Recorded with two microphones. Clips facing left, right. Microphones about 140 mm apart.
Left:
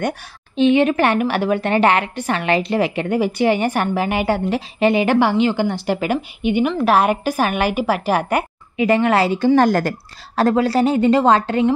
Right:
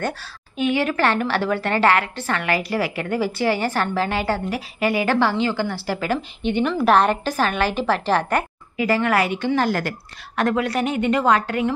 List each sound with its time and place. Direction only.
0.6 s a woman's voice: 20° left (ahead or behind)